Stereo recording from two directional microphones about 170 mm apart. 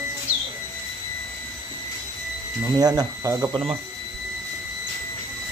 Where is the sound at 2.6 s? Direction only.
20° right (ahead or behind).